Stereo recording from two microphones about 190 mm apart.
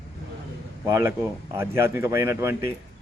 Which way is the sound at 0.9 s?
15° right (ahead or behind).